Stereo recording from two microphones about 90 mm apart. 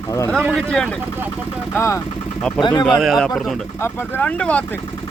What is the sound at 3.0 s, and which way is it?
Speech, centre (ahead or behind).